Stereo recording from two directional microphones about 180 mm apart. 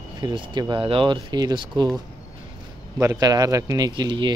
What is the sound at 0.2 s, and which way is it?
Speech, 25° right (ahead or behind).